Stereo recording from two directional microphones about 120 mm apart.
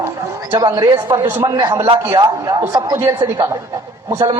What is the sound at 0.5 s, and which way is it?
Speech, 35° right (ahead or behind).